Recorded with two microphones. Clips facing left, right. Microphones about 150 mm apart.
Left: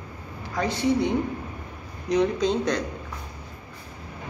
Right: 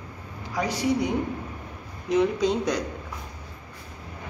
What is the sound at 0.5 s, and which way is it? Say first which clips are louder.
Speech: left 1 dB; 10° right (ahead or behind).